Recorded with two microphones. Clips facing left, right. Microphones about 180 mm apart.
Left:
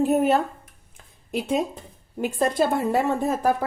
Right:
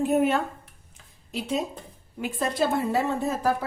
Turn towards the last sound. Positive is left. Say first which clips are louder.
# left 3 dB
turn(degrees=50)  # may be behind; listen again after turning